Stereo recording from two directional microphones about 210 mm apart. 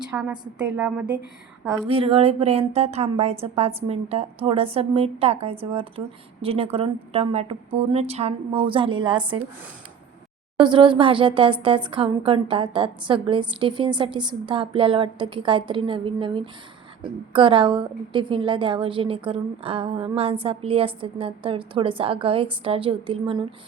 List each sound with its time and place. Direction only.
0.1 s a woman's voice: 5° right (ahead or behind)
1.9 s speech: 25° right (ahead or behind)
10.6 s speech: 25° right (ahead or behind)